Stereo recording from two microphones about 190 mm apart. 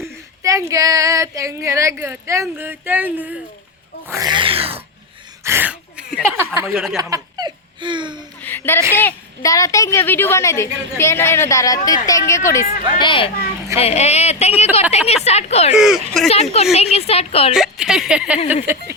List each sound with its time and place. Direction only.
0.4 s a woman's voice: 15° right (ahead or behind)
4.1 s a sound: 20° right (ahead or behind)
5.4 s a sound: 10° right (ahead or behind)
6.3 s a sound: 15° right (ahead or behind)
6.9 s laughter: 20° right (ahead or behind)
8.4 s music: 10° left (ahead or behind)
9.0 s a child's voice: 15° left (ahead or behind)
12.6 s a woman's voice: 25° left (ahead or behind)
15.7 s speech: centre (ahead or behind)
16.3 s speech: 35° left (ahead or behind)
17.5 s speech: 5° right (ahead or behind)